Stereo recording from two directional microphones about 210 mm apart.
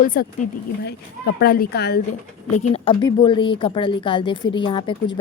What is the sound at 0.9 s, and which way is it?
Speech, 55° left (ahead or behind).